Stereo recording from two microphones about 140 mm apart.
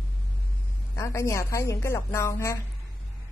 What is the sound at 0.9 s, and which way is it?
A woman's voice, 20° left (ahead or behind).